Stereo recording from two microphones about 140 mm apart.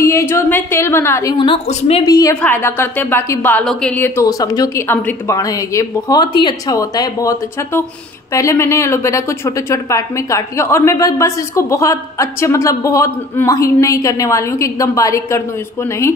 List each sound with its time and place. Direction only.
0.0 s speech: 20° left (ahead or behind)
1.3 s a woman's voice: 35° left (ahead or behind)
1.7 s a woman's voice: 50° left (ahead or behind)
2.0 s a woman's voice: 25° left (ahead or behind)
2.4 s speech: 15° left (ahead or behind)
4.8 s a woman's voice: 15° left (ahead or behind)